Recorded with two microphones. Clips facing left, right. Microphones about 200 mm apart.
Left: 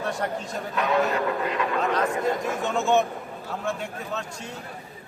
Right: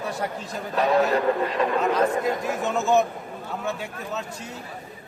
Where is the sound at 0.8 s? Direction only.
35° right (ahead or behind).